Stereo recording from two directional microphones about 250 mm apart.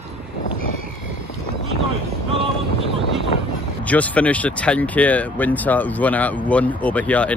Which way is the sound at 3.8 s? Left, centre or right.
Centre.